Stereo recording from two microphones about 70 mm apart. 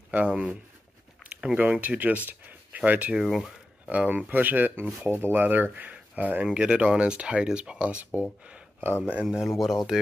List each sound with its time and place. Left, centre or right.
0.1 s speech: centre
3.2 s speech: centre
3.9 s speech: centre
9.5 s speech: centre